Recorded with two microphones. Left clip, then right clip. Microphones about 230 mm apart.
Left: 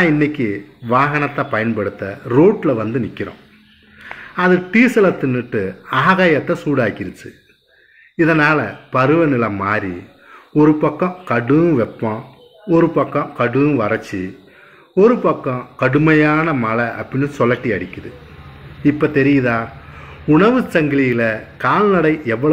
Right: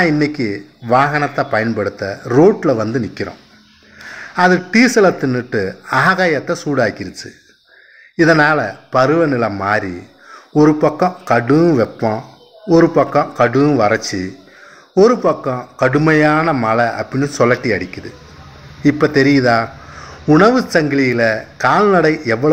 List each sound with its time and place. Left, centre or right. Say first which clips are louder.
0.0 s a man's voice: even; centre
8.2 s a man's voice: right 2 dB; centre